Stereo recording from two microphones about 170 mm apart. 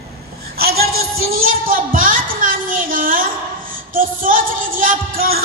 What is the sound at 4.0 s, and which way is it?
Music, 55° right (ahead or behind).